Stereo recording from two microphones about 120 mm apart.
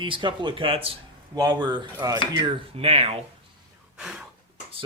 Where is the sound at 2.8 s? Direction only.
60° right (ahead or behind).